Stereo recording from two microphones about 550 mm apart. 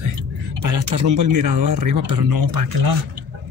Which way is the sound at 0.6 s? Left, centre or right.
Right.